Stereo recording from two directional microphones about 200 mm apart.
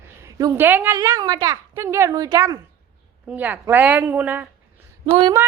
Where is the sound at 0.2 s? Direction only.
15° right (ahead or behind).